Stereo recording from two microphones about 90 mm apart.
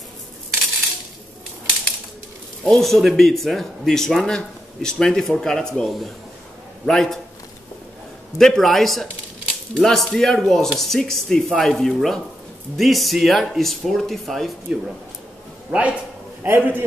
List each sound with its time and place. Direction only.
2.6 s a man's voice: 5° left (ahead or behind)
8.4 s speech: 5° left (ahead or behind)
15.7 s a man's voice: 20° right (ahead or behind)